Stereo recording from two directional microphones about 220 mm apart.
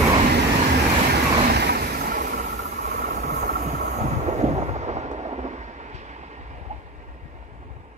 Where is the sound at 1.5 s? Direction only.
45° right (ahead or behind); by 6.8 s 30° right (ahead or behind).